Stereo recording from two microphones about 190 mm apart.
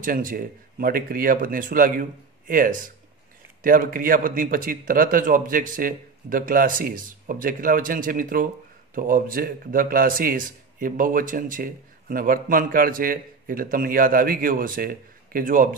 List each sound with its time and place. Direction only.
0.0 s a man's voice: 45° right (ahead or behind)